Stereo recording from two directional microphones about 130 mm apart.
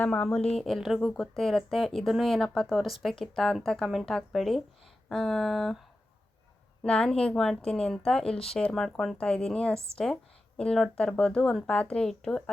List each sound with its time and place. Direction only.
0.0 s speech: 5° left (ahead or behind)
6.8 s speech: 5° left (ahead or behind)